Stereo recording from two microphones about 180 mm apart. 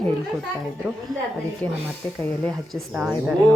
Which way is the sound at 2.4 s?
Centre (ahead or behind).